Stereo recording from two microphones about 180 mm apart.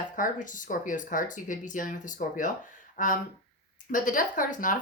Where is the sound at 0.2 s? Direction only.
45° left (ahead or behind).